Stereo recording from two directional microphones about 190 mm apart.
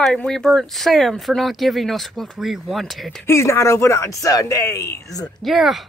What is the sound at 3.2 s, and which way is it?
Speech, 15° left (ahead or behind).